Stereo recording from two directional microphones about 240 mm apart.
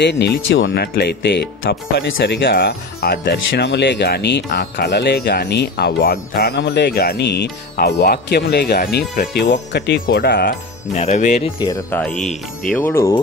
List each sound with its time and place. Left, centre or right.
0.0 s speech: left
11.0 s speech: left
11.6 s speech: centre
12.0 s music: centre
12.6 s speech: centre